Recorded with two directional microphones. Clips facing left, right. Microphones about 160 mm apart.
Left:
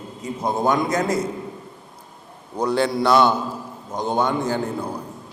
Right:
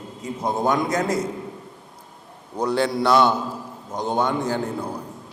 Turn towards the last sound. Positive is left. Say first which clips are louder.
# left 1 dB
turn(degrees=30)  # may be behind; listen again after turning